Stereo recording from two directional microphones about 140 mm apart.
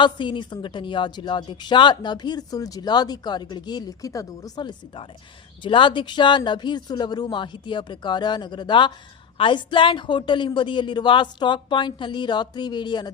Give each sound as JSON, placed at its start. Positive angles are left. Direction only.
{"t": 0.0, "sound": "a woman's voice", "side_deg": 35}